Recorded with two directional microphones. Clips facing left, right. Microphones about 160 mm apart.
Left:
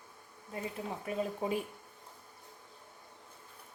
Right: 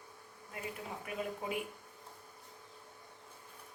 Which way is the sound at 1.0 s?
30° left (ahead or behind).